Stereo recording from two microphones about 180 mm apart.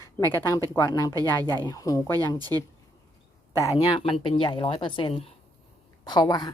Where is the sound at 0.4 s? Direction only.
15° left (ahead or behind).